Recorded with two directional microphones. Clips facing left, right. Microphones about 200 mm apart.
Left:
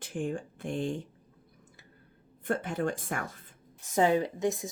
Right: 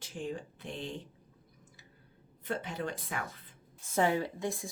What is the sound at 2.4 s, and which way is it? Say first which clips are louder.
Speech: left 6 dB; 50° left (ahead or behind).